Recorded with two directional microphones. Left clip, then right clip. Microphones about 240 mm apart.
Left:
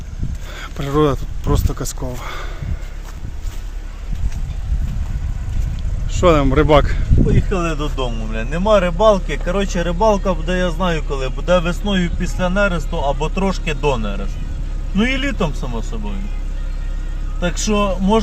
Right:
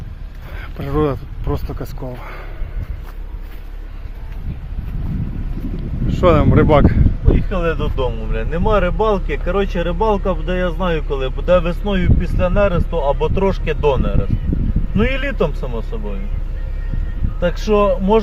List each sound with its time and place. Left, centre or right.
0.5 s speech: centre
6.1 s speech: centre
7.5 s speech: centre
17.4 s speech: centre